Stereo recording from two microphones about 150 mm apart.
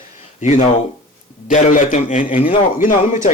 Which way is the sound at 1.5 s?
60° left (ahead or behind).